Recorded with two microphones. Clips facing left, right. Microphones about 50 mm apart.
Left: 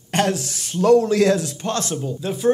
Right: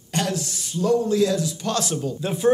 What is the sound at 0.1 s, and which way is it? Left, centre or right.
Speech, left.